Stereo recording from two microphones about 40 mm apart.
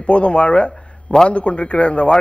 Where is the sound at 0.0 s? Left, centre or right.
Left.